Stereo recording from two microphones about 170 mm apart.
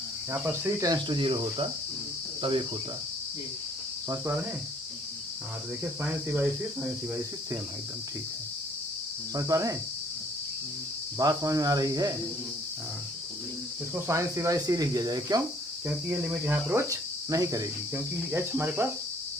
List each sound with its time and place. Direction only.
0.3 s speech: 15° right (ahead or behind)
5.8 s speech: 15° right (ahead or behind)
9.3 s speech: 20° right (ahead or behind)
11.2 s speech: 20° right (ahead or behind)
13.9 s speech: 15° right (ahead or behind)
15.9 s speech: 10° right (ahead or behind)